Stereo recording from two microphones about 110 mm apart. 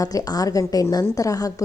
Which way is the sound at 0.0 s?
30° left (ahead or behind).